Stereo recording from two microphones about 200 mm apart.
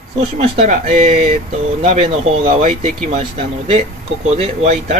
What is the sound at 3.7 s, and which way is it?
A man's voice, 30° right (ahead or behind).